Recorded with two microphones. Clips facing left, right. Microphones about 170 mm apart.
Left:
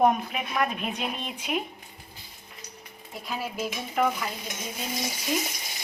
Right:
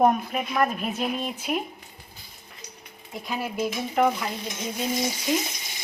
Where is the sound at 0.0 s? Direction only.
Centre (ahead or behind).